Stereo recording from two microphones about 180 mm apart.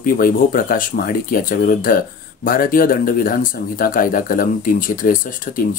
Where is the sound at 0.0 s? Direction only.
50° left (ahead or behind).